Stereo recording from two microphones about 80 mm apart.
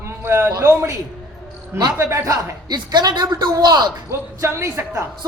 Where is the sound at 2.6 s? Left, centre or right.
Right.